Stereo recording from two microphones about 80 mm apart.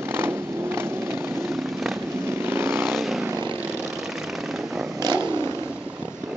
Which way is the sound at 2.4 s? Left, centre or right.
Right.